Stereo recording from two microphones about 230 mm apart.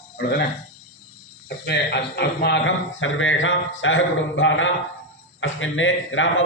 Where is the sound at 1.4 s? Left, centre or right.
Left.